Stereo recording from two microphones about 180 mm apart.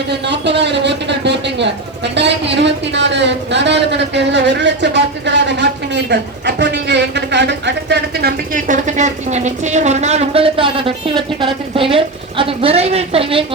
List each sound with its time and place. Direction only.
0.1 s a sound: 70° right (ahead or behind)
2.1 s speech: 75° right (ahead or behind)
8.5 s speech: 45° right (ahead or behind)